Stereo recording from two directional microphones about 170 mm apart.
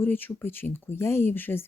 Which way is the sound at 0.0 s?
10° left (ahead or behind).